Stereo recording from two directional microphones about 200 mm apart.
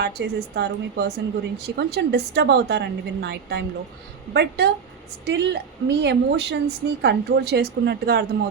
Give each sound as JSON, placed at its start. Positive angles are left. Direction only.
{"t": 0.0, "sound": "a woman's voice", "side_deg": -55}